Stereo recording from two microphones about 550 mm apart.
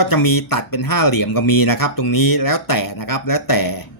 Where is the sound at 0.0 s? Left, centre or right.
Left.